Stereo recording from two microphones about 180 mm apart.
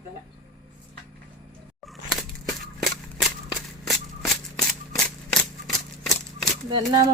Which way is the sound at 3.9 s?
Centre (ahead or behind).